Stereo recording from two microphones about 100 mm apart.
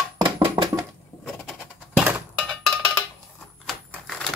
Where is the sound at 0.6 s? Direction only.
35° right (ahead or behind).